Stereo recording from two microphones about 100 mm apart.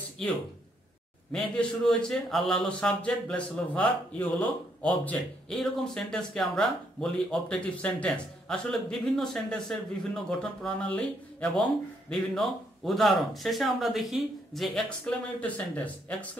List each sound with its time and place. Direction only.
1.3 s a man's voice: 10° left (ahead or behind)
15.0 s speech: 15° left (ahead or behind)